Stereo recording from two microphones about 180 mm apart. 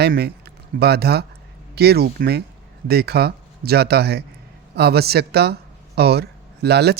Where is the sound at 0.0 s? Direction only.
60° right (ahead or behind).